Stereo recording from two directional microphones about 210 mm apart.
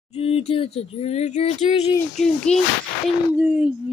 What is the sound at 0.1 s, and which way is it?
Speech, 30° left (ahead or behind).